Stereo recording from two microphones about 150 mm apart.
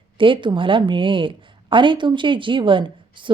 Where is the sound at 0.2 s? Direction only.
35° right (ahead or behind).